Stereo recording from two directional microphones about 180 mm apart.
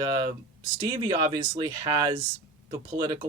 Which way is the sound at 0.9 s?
20° right (ahead or behind).